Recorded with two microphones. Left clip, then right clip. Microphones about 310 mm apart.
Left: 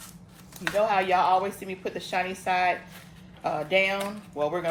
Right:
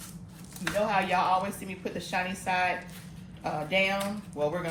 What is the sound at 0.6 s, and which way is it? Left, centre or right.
Speech, left.